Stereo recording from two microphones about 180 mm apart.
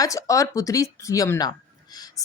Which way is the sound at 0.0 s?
15° left (ahead or behind).